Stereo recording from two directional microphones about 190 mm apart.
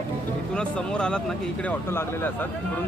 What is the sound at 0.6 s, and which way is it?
Speech, 5° left (ahead or behind).